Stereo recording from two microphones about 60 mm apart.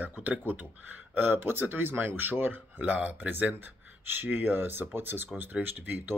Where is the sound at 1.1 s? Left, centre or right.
Right.